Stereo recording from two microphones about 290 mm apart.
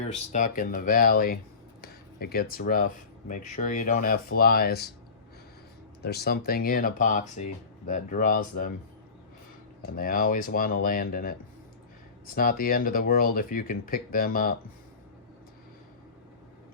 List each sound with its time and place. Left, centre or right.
0.3 s speech: left
6.0 s speech: left
9.9 s speech: left